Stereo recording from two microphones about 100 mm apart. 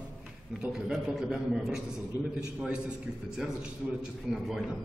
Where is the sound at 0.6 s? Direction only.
5° right (ahead or behind).